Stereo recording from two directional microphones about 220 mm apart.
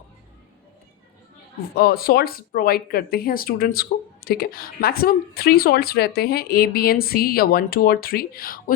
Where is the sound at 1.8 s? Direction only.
45° left (ahead or behind).